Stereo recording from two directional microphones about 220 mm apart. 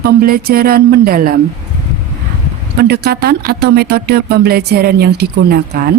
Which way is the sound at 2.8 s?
45° right (ahead or behind).